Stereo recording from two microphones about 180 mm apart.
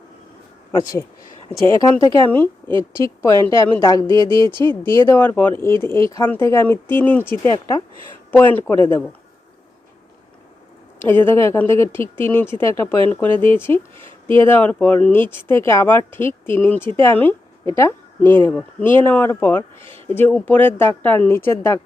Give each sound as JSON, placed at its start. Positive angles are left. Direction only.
{"t": 0.7, "sound": "speech", "side_deg": 15}
{"t": 4.3, "sound": "speech", "side_deg": -25}
{"t": 4.8, "sound": "speech", "side_deg": 15}
{"t": 7.5, "sound": "speech", "side_deg": 25}
{"t": 8.3, "sound": "speech", "side_deg": 10}
{"t": 11.0, "sound": "speech", "side_deg": 10}
{"t": 19.8, "sound": "speech", "side_deg": -30}
{"t": 20.1, "sound": "speech", "side_deg": 10}